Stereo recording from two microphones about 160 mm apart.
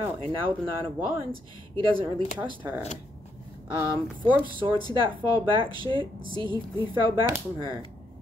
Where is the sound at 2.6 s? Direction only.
10° right (ahead or behind).